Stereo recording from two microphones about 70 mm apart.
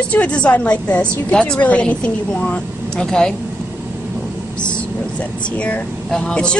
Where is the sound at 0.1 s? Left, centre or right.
Centre.